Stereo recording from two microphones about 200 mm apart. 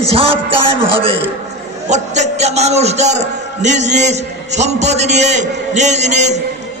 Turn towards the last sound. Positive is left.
turn(degrees=-35)  # may be behind; listen again after turning